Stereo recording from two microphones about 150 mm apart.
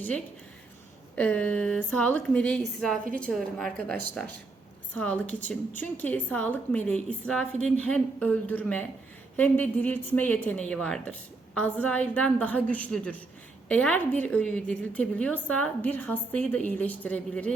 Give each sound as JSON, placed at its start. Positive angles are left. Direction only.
{"t": 1.1, "sound": "a woman's voice", "side_deg": 10}